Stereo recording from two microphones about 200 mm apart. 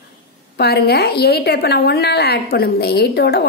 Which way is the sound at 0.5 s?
50° left (ahead or behind).